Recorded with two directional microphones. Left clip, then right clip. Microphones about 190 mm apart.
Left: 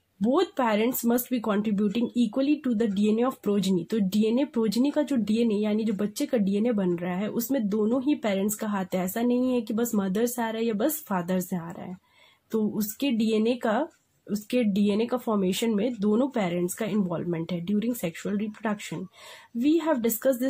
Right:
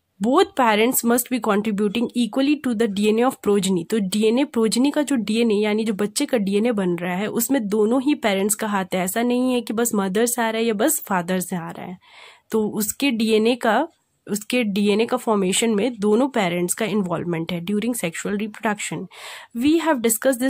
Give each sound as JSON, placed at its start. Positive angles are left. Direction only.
{"t": 0.2, "sound": "speech", "side_deg": -40}